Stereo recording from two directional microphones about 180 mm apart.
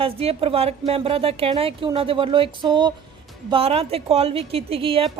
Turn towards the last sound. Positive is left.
turn(degrees=-30)  # may be behind; listen again after turning